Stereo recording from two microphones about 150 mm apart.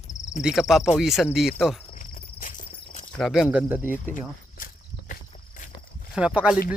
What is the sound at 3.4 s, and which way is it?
Speech, 15° right (ahead or behind).